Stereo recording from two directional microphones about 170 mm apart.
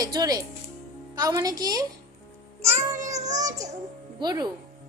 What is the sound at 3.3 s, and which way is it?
Child singing, 20° right (ahead or behind).